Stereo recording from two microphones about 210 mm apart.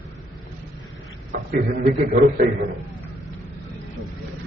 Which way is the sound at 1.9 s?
45° right (ahead or behind).